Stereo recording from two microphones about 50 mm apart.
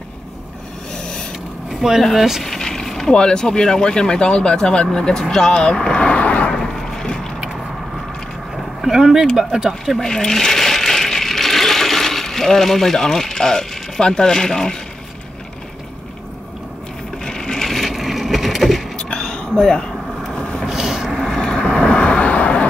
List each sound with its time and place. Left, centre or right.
0.9 s a sound: centre
1.7 s speech: centre
2.4 s vehicle: centre
3.2 s speech: centre
6.5 s vehicle: centre
8.8 s speech: centre
9.9 s a sound: centre
17.2 s wood: centre
18.9 s a sound: centre
20.6 s vehicle: centre
21.1 s vehicle: centre
21.4 s vehicle: centre